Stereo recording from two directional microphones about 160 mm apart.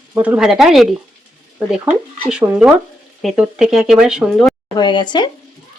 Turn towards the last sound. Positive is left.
turn(degrees=30)  # may be behind; listen again after turning